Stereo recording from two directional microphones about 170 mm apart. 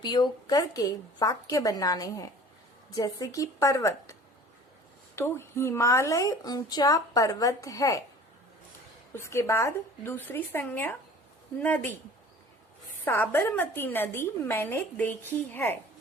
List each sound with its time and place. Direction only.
0.0 s speech: 25° left (ahead or behind)
5.1 s speech: 15° left (ahead or behind)
9.1 s a woman's voice: 15° left (ahead or behind)
13.1 s a woman's voice: 10° left (ahead or behind)